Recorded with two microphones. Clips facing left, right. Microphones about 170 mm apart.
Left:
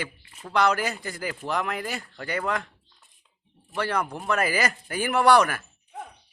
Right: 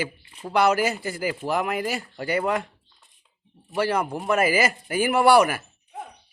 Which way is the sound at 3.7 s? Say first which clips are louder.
Right 4 dB; 10° right (ahead or behind).